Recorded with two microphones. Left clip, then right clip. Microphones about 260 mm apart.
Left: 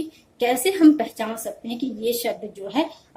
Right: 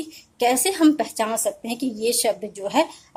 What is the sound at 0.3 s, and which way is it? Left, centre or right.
Speech, right.